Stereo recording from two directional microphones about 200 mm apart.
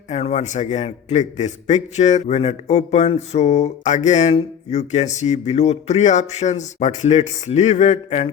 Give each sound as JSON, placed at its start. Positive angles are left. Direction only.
{"t": 0.1, "sound": "a man's voice", "side_deg": 35}